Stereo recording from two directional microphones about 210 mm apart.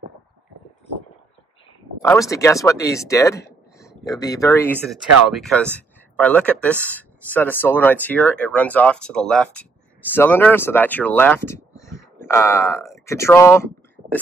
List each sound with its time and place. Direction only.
2.0 s speech: 15° left (ahead or behind)
4.8 s speech: centre (ahead or behind)